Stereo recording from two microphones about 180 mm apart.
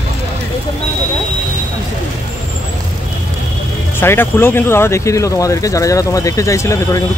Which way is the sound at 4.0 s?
15° left (ahead or behind).